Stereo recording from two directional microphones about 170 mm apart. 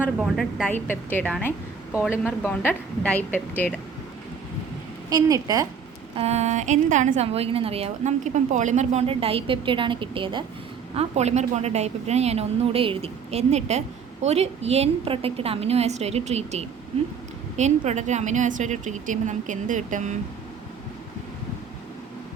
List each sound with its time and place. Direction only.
0.0 s a woman's voice: 5° right (ahead or behind)
0.7 s a woman's voice: 10° left (ahead or behind)
5.0 s a woman's voice: 20° right (ahead or behind)
6.1 s speech: 40° right (ahead or behind)
10.9 s a woman's voice: 40° right (ahead or behind)